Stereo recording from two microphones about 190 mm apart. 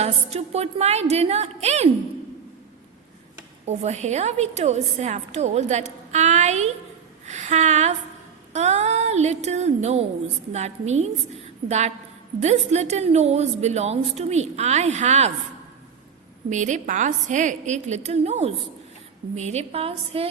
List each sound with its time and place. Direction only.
0.0 s a woman's voice: 35° right (ahead or behind)
3.7 s a woman's voice: 35° right (ahead or behind)
7.3 s a sound: 40° right (ahead or behind)
8.5 s a woman's voice: 35° right (ahead or behind)
16.5 s a woman's voice: 40° right (ahead or behind)